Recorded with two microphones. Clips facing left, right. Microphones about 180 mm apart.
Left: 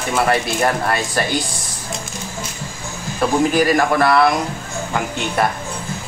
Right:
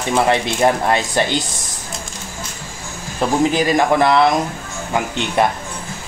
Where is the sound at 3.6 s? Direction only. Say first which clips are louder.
Even; 20° right (ahead or behind).